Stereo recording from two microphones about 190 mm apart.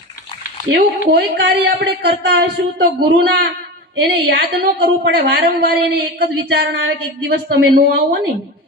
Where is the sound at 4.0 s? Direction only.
60° right (ahead or behind).